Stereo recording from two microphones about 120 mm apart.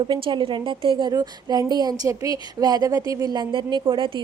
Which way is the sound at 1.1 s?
35° right (ahead or behind).